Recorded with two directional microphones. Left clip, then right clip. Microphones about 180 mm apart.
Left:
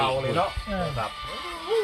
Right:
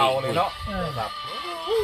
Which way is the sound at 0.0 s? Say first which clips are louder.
Right 3 dB; 70° right (ahead or behind).